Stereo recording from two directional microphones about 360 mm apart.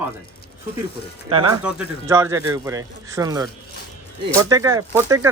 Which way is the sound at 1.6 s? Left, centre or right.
Centre.